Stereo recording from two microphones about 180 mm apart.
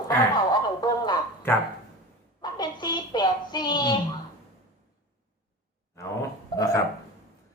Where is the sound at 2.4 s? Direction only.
20° left (ahead or behind).